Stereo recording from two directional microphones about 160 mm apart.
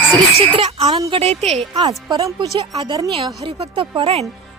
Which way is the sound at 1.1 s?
40° right (ahead or behind).